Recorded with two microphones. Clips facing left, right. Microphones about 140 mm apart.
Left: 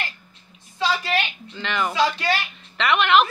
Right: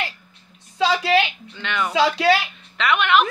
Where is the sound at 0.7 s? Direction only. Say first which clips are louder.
Right 5 dB; 90° right.